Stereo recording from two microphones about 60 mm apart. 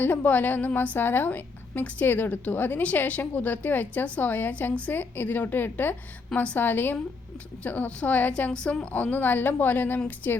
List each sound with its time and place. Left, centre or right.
0.0 s a woman's voice: left; by 8.9 s centre
8.9 s a woman's voice: left